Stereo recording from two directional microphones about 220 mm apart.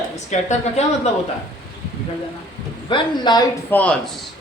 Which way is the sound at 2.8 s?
20° left (ahead or behind).